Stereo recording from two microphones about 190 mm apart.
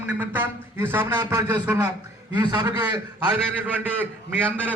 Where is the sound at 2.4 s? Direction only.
20° right (ahead or behind).